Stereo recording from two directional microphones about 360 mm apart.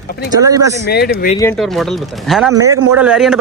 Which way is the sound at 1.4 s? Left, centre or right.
Centre.